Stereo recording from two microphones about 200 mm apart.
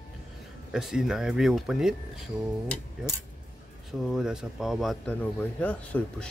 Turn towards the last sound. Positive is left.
turn(degrees=5)  # may be behind; listen again after turning